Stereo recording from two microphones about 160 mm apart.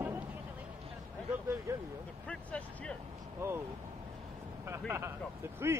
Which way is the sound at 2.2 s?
5° left (ahead or behind).